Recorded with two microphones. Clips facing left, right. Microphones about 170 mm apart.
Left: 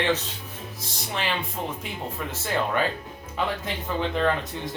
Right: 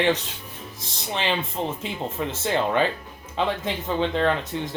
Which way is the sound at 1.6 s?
25° right (ahead or behind).